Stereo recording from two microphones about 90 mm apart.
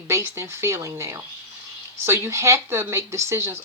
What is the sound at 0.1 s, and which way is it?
Speech, 35° right (ahead or behind).